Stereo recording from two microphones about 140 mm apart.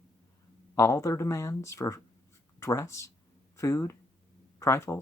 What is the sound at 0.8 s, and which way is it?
Speech, 20° left (ahead or behind).